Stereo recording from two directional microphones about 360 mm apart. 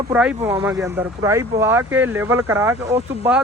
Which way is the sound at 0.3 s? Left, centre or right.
Centre.